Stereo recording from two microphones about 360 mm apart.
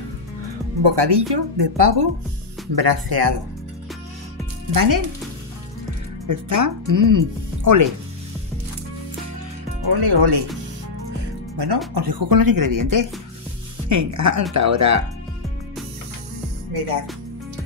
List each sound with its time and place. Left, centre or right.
0.9 s speech: right
2.7 s speech: right
4.7 s speech: right
6.2 s speech: right
9.8 s speech: right
11.5 s speech: right